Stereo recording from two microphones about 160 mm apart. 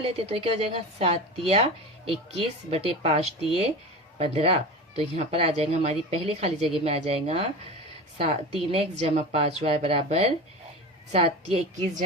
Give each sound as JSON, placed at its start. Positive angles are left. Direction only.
{"t": 0.0, "sound": "speech", "side_deg": -35}